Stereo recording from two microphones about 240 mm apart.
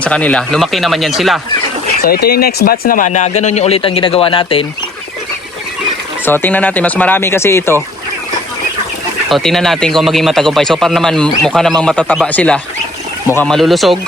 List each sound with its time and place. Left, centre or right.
0.0 s speech: centre
2.0 s speech: left
6.2 s speech: centre
9.3 s speech: centre